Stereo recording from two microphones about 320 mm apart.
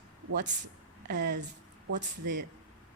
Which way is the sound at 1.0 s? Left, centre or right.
Right.